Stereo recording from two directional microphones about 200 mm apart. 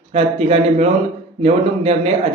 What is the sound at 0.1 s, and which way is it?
A man's voice, 30° right (ahead or behind).